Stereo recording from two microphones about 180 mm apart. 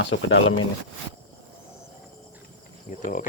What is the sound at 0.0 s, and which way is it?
Speech, 90° left.